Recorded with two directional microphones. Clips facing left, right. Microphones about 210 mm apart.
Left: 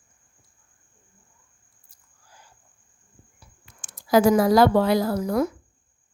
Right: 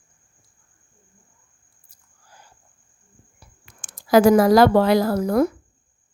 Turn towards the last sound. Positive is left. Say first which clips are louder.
# right 4 dB
turn(degrees=-60)  # may be behind; listen again after turning